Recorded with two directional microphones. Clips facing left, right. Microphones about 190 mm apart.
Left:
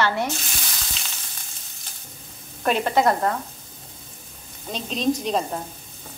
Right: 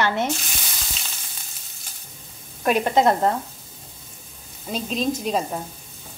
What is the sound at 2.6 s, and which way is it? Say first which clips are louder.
Speech: right 2 dB; 15° right (ahead or behind).